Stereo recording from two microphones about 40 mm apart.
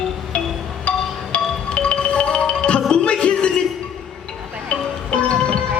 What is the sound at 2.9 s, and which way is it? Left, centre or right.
Music, left.